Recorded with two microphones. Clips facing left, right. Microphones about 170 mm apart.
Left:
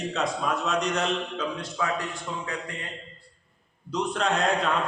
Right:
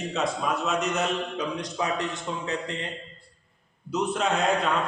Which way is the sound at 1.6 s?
20° right (ahead or behind).